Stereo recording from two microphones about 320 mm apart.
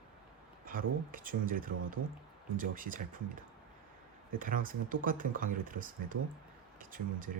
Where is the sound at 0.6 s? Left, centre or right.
Right.